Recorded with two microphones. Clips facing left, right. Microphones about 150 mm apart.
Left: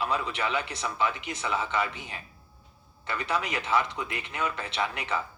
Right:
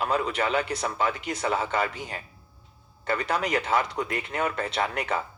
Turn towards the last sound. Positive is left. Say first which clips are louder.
# right 4 dB
turn(degrees=-45)  # may be behind; listen again after turning